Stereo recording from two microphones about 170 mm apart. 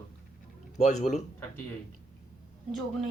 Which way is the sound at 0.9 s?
45° left (ahead or behind).